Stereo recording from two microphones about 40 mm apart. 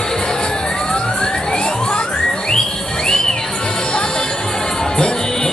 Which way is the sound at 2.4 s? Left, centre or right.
Centre.